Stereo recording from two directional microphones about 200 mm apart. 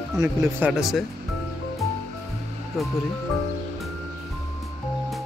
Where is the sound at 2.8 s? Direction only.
Centre (ahead or behind).